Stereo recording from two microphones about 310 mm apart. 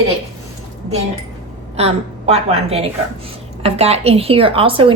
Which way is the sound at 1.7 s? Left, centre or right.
Centre.